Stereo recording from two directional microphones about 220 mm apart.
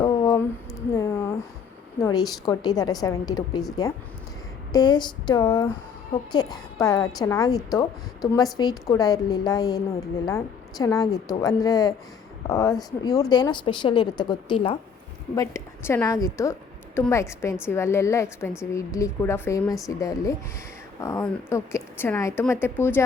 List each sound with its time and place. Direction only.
0.0 s a sound: 15° left (ahead or behind)
2.0 s a woman's voice: 15° left (ahead or behind)
4.7 s a woman's voice: 20° left (ahead or behind)
15.4 s a woman's voice: 10° left (ahead or behind)